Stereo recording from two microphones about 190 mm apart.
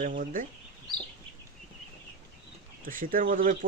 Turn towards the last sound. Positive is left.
turn(degrees=-45)  # may be behind; listen again after turning